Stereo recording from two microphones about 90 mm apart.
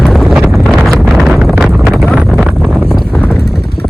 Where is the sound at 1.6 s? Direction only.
5° right (ahead or behind).